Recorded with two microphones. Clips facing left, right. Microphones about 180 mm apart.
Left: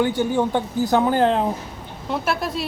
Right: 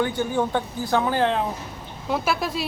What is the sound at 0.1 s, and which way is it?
Speech, 15° left (ahead or behind).